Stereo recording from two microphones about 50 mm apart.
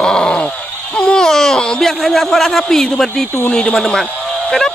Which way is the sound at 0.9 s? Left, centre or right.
Centre.